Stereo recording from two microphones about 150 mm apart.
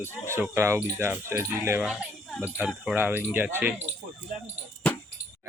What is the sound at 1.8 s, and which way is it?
Speech, 5° right (ahead or behind).